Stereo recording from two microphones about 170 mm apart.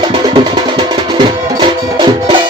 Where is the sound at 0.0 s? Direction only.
25° right (ahead or behind).